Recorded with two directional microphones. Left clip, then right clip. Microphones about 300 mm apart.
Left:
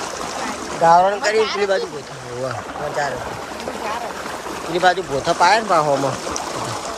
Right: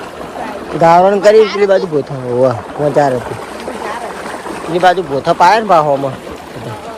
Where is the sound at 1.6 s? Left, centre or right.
Centre.